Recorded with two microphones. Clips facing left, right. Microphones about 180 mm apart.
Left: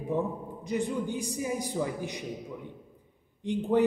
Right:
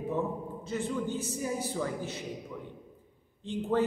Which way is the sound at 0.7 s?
15° left (ahead or behind).